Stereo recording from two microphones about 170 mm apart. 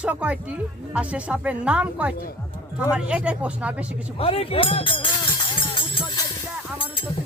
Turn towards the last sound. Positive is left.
turn(degrees=30)  # may be behind; listen again after turning